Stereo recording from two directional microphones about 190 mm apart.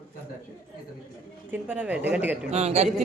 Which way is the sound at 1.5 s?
10° right (ahead or behind).